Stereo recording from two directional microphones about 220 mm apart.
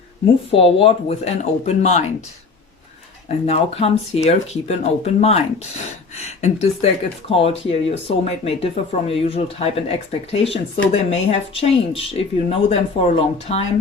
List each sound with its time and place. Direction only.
0.5 s speech: 25° left (ahead or behind)
3.2 s speech: 30° left (ahead or behind)